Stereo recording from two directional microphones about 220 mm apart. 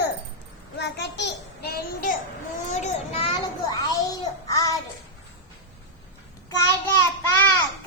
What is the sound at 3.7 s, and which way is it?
A child's voice, 15° left (ahead or behind).